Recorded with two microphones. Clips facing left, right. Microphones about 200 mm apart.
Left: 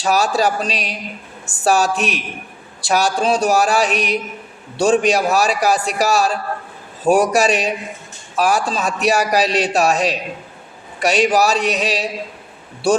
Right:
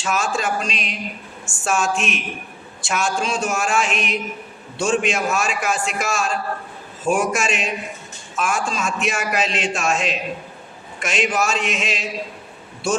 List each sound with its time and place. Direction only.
0.0 s a man's voice: 35° left (ahead or behind)